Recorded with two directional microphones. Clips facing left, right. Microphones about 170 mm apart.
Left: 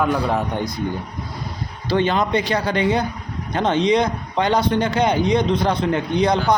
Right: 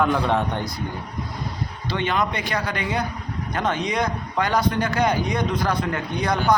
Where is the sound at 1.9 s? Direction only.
30° left (ahead or behind).